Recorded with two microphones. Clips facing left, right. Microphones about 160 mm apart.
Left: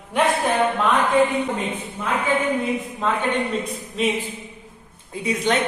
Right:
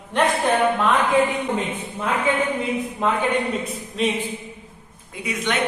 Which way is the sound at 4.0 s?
Centre (ahead or behind).